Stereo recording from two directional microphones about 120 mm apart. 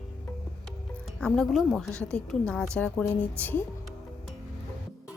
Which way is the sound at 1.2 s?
5° left (ahead or behind).